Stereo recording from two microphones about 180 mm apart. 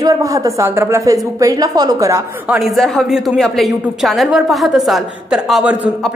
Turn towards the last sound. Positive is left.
turn(degrees=-5)  # may be behind; listen again after turning